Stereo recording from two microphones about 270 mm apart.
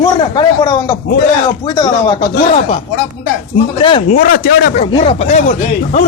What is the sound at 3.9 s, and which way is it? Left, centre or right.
Speech, centre.